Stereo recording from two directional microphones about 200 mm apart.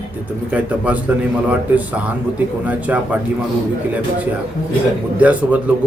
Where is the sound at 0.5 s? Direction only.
5° right (ahead or behind).